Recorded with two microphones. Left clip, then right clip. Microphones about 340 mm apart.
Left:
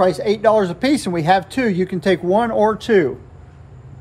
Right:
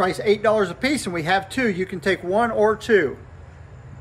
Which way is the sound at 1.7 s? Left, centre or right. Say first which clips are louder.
Left 5 dB; left.